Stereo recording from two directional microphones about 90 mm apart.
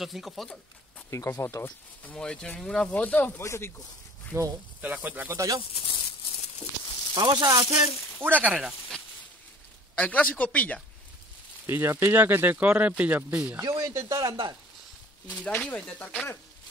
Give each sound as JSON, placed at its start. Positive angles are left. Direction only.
{"t": 0.0, "sound": "speech", "side_deg": 0}
{"t": 1.1, "sound": "speech", "side_deg": 30}
{"t": 2.1, "sound": "speech", "side_deg": 10}
{"t": 4.3, "sound": "speech", "side_deg": -30}
{"t": 4.8, "sound": "speech", "side_deg": -20}
{"t": 5.7, "sound": "speech", "side_deg": 85}
{"t": 7.2, "sound": "speech", "side_deg": -50}
{"t": 8.2, "sound": "speech", "side_deg": -20}
{"t": 8.5, "sound": "speech", "side_deg": -5}
{"t": 9.9, "sound": "speech", "side_deg": 15}
{"t": 11.6, "sound": "speech", "side_deg": -30}
{"t": 13.6, "sound": "speech", "side_deg": -35}
{"t": 15.3, "sound": "speech", "side_deg": 15}